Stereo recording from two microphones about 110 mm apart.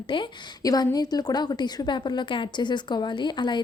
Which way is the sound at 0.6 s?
35° left (ahead or behind).